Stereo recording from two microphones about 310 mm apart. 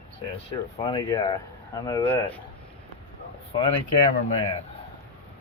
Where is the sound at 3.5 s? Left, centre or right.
Centre.